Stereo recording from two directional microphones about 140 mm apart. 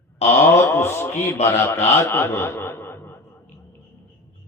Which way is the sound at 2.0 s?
20° left (ahead or behind).